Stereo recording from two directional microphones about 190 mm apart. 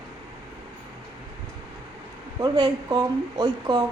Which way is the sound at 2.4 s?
20° right (ahead or behind).